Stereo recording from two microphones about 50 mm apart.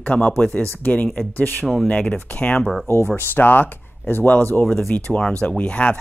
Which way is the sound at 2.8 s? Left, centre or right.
Left.